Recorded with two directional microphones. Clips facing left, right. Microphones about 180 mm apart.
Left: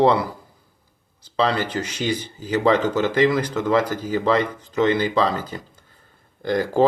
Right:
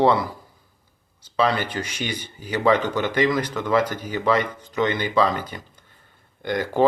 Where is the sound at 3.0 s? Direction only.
30° left (ahead or behind).